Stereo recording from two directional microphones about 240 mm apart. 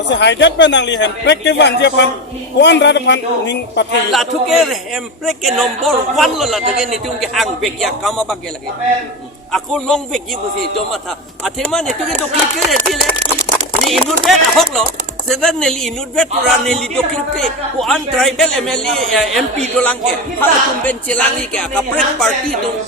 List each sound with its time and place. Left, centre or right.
0.1 s speech: left
4.1 s a man's voice: centre
9.5 s a man's voice: centre
11.4 s a man's voice: centre